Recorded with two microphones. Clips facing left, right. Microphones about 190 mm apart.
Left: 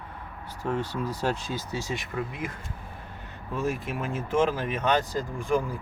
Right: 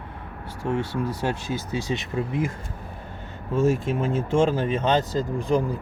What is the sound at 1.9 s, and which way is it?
Speech, 25° right (ahead or behind).